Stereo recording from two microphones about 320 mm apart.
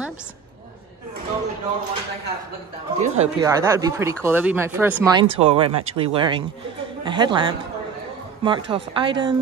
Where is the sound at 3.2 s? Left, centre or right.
Centre.